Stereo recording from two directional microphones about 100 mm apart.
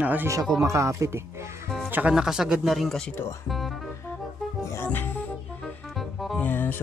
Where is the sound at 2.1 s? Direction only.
5° right (ahead or behind).